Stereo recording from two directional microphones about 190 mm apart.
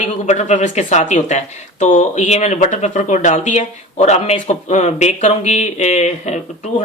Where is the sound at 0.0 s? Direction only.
35° left (ahead or behind).